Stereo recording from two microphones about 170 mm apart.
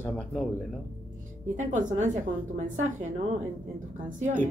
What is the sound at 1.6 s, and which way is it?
Speech, 45° right (ahead or behind).